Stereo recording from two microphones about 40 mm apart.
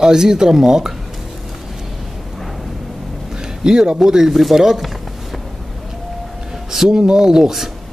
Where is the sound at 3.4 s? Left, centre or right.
Centre.